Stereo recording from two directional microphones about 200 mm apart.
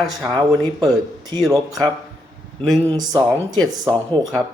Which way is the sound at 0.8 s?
20° right (ahead or behind).